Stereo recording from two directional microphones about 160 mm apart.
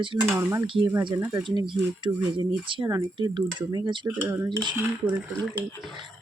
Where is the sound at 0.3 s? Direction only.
15° right (ahead or behind).